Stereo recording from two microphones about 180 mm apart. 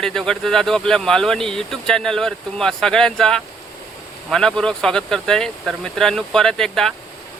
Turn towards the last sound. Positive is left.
turn(degrees=0)  # may be behind; listen again after turning